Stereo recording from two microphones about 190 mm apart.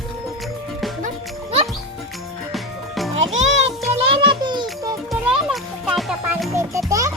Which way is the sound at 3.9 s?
25° right (ahead or behind).